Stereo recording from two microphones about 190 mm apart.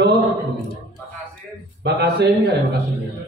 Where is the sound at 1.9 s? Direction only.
60° right (ahead or behind).